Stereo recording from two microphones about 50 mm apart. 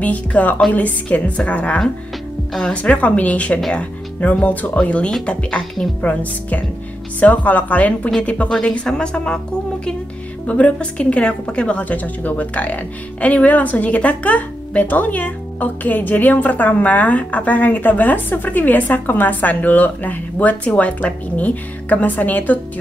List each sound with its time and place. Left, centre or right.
0.0 s a woman's voice: left; by 9.4 s centre
10.4 s a woman's voice: left
11.8 s speech: left